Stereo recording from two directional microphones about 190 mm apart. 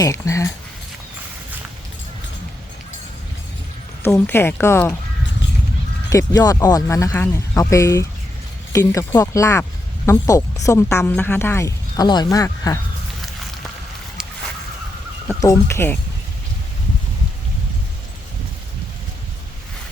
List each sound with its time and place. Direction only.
0.0 s speech: 15° left (ahead or behind)
4.0 s speech: 10° left (ahead or behind)
6.1 s speech: 20° left (ahead or behind)
15.3 s speech: 15° left (ahead or behind)